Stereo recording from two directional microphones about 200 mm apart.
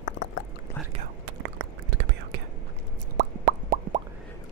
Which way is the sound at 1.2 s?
70° right (ahead or behind).